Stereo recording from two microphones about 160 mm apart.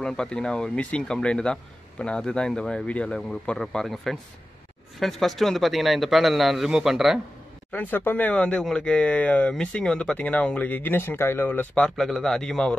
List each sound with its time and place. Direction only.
0.0 s speech: 5° left (ahead or behind)
7.7 s speech: 10° left (ahead or behind)